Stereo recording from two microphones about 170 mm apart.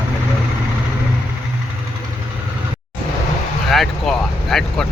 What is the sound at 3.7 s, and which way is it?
Speech, centre (ahead or behind).